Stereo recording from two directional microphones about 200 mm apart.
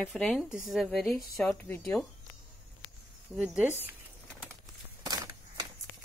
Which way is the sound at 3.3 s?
5° right (ahead or behind).